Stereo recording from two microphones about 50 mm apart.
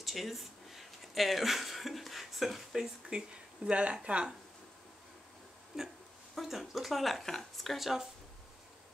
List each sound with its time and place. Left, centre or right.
0.0 s a sound: centre
3.1 s speech: centre
5.7 s hiccup: centre
6.3 s speech: centre